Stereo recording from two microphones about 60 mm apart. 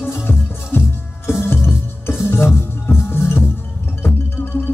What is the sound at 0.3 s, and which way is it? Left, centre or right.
Music, left.